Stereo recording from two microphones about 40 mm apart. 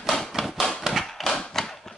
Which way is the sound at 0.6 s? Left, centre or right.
Centre.